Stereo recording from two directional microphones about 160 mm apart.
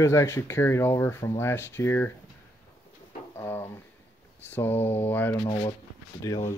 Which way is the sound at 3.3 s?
15° left (ahead or behind).